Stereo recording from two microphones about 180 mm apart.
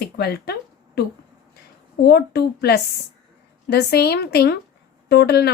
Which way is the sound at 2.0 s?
60° left (ahead or behind).